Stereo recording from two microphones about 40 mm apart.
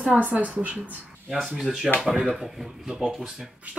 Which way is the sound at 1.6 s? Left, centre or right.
Centre.